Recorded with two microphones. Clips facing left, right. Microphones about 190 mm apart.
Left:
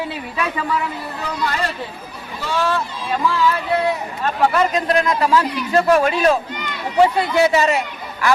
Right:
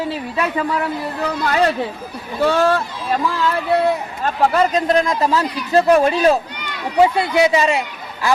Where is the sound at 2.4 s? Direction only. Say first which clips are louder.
Right 6 dB; 50° right (ahead or behind).